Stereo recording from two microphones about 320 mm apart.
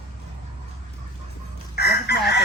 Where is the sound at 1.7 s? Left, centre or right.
Left.